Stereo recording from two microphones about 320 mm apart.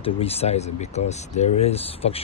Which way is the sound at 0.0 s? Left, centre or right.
Centre.